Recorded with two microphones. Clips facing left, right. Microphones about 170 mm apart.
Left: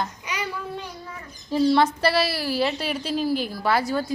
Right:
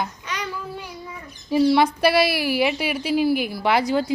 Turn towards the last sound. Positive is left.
turn(degrees=-15)  # may be behind; listen again after turning